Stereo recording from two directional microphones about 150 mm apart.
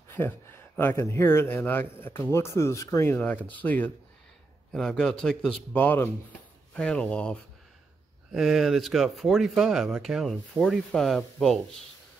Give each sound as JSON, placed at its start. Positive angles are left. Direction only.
{"t": 0.1, "sound": "speech", "side_deg": 15}